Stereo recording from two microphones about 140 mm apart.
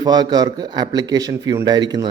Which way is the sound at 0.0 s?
30° right (ahead or behind).